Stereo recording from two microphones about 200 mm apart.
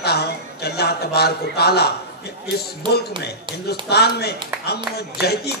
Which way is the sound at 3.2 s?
55° left (ahead or behind).